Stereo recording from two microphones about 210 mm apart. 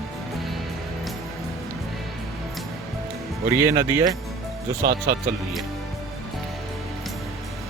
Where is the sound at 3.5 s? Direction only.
10° right (ahead or behind).